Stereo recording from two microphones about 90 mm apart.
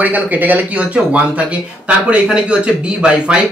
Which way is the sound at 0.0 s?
20° right (ahead or behind).